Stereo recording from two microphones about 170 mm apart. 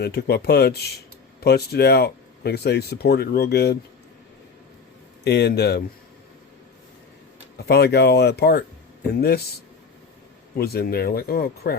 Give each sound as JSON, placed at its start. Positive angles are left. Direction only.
{"t": 0.0, "sound": "speech", "side_deg": 75}
{"t": 5.2, "sound": "speech", "side_deg": 70}
{"t": 7.7, "sound": "speech", "side_deg": 70}
{"t": 10.5, "sound": "speech", "side_deg": 65}